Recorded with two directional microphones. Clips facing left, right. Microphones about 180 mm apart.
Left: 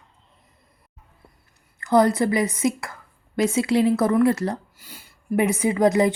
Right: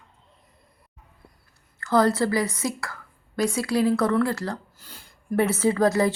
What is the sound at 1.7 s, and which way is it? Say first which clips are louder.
A woman's voice: left 3 dB; 15° left (ahead or behind).